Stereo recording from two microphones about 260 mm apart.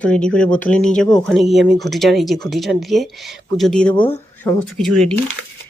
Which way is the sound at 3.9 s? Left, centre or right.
Centre.